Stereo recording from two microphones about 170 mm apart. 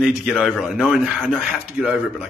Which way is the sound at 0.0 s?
5° right (ahead or behind).